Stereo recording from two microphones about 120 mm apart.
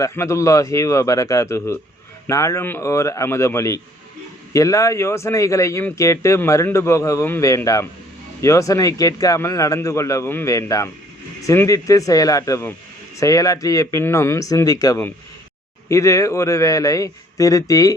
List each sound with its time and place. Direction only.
0.0 s speech: 25° left (ahead or behind)